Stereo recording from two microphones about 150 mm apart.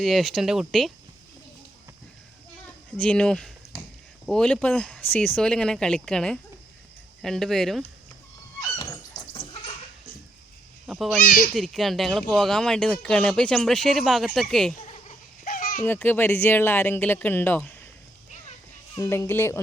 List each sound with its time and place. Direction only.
0.0 s speech: centre (ahead or behind)
3.0 s speech: 5° left (ahead or behind)
8.8 s a sound: 30° left (ahead or behind)
10.8 s a child's voice: 5° right (ahead or behind)
11.2 s speech: 65° left (ahead or behind)
11.5 s speech: 5° left (ahead or behind)
14.8 s goat: 50° left (ahead or behind)
15.4 s a sound: 65° left (ahead or behind)
15.8 s speech: 10° left (ahead or behind)
18.9 s speech: 20° left (ahead or behind)